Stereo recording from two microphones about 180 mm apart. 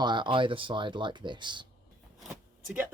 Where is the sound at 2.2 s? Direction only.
5° right (ahead or behind).